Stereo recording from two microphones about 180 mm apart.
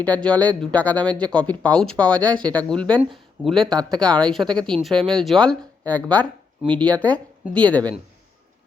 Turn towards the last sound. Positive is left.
turn(degrees=5)  # may be behind; listen again after turning